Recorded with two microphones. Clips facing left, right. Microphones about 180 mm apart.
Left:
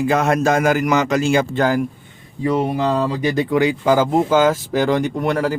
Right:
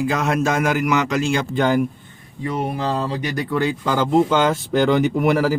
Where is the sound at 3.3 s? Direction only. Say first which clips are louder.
Left 5 dB; 25° left (ahead or behind).